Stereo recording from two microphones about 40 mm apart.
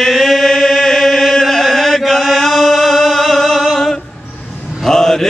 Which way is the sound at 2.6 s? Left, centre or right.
Centre.